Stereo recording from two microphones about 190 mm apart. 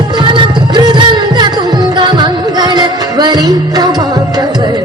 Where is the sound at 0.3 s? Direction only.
25° right (ahead or behind).